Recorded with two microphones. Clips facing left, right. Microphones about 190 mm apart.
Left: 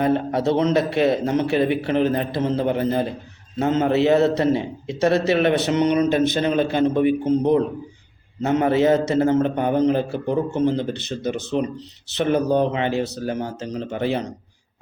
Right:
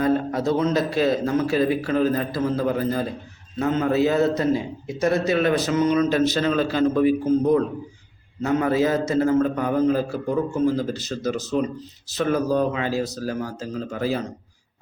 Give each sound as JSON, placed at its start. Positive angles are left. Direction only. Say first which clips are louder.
{"t": 0.0, "sound": "a man's voice", "louder": "left 1 dB", "side_deg": 25}
{"t": 8.4, "sound": "a man's voice", "louder": "left 2 dB", "side_deg": 30}